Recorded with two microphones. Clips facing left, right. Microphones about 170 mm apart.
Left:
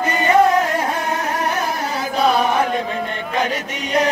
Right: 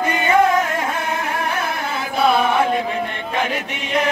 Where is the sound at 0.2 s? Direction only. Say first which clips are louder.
Left 2 dB; 40° left (ahead or behind).